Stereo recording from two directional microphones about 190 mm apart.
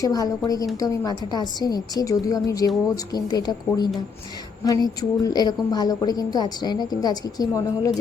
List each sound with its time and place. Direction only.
0.0 s a woman's voice: 20° left (ahead or behind)